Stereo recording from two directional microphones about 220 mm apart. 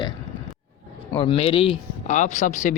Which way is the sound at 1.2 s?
25° left (ahead or behind).